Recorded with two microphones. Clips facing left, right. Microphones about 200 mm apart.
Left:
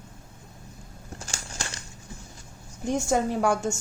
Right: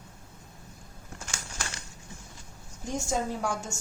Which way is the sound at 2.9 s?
65° left (ahead or behind).